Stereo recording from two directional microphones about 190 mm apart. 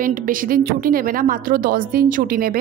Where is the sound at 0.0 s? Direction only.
45° right (ahead or behind).